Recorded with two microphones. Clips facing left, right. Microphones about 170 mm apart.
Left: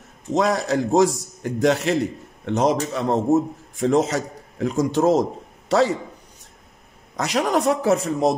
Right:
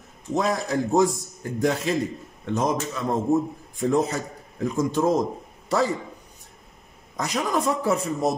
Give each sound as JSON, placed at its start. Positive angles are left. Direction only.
{"t": 0.3, "sound": "a man's voice", "side_deg": 75}
{"t": 7.2, "sound": "a man's voice", "side_deg": 75}